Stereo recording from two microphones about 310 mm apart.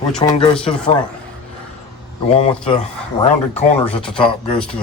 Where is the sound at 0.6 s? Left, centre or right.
Centre.